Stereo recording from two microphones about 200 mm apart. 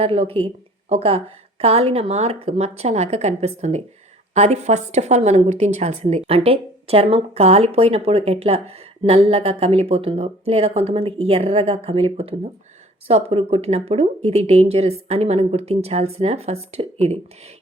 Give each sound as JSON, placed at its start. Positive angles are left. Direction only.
{"t": 0.0, "sound": "a woman's voice", "side_deg": -30}